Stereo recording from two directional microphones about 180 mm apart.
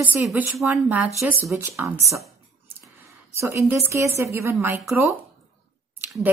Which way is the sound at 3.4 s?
15° right (ahead or behind).